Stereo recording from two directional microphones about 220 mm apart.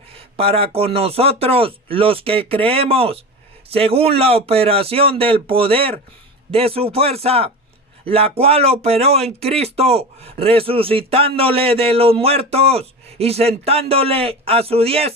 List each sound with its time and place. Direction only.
0.1 s speech: 25° right (ahead or behind)